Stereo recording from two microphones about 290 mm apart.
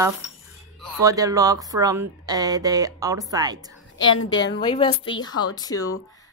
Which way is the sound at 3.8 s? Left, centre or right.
Left.